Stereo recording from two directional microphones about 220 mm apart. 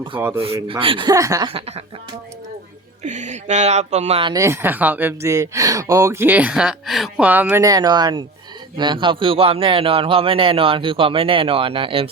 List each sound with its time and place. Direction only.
0.3 s a man's voice: 25° right (ahead or behind)
3.0 s a man's voice: 35° right (ahead or behind)